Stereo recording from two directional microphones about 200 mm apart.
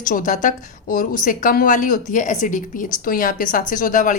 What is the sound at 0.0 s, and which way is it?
A woman's voice, 40° left (ahead or behind).